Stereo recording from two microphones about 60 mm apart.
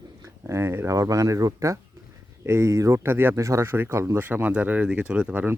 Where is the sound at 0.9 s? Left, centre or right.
Right.